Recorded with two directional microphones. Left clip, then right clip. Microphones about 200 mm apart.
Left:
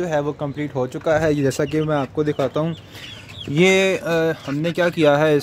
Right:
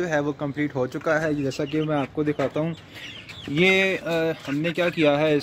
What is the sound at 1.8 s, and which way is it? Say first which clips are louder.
Speech: left 4 dB; 10° left (ahead or behind).